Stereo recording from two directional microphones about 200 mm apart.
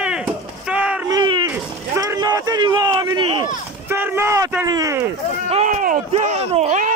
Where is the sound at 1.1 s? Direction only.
20° right (ahead or behind).